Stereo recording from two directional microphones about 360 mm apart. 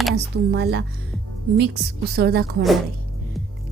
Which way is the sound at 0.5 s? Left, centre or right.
Right.